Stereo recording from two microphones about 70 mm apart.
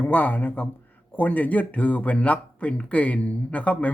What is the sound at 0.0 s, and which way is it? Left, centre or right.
A man's voice, left.